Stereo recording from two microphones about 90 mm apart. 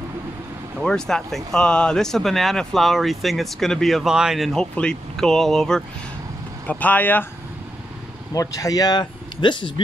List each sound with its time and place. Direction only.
0.7 s speech: 5° left (ahead or behind)
6.7 s speech: 15° left (ahead or behind)
8.3 s speech: 40° left (ahead or behind); by 9.8 s 60° left (ahead or behind)